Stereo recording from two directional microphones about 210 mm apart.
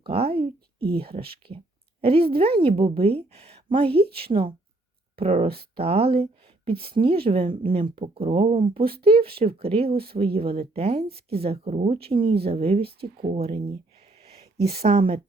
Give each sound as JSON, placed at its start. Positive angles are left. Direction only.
{"t": 0.0, "sound": "speech", "side_deg": -30}
{"t": 14.3, "sound": "a sound", "side_deg": -50}
{"t": 14.8, "sound": "speech", "side_deg": -25}